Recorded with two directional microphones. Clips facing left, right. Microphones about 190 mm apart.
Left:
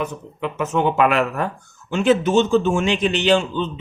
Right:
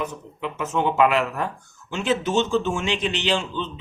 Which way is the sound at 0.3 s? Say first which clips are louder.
Left 4 dB; 55° left (ahead or behind).